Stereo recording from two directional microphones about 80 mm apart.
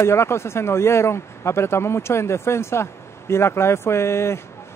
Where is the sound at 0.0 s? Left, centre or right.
Left.